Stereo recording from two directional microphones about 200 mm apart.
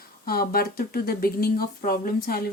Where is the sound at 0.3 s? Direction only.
50° left (ahead or behind).